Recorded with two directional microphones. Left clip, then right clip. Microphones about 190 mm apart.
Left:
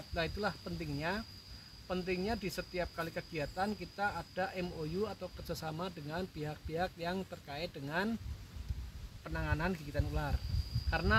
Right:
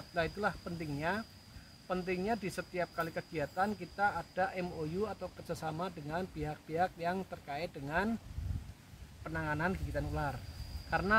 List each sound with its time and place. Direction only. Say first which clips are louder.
0.1 s speech: right 2 dB; 5° left (ahead or behind)
9.2 s speech: right 2 dB; 5° left (ahead or behind)